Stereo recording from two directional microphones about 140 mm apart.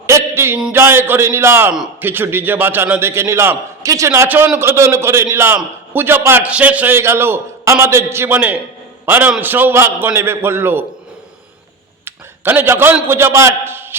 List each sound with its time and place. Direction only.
0.1 s a sound: 20° right (ahead or behind)
0.7 s a man's voice: 15° right (ahead or behind)
12.0 s a man's voice: 15° right (ahead or behind)